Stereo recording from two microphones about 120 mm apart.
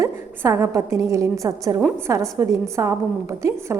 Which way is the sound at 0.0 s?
20° right (ahead or behind).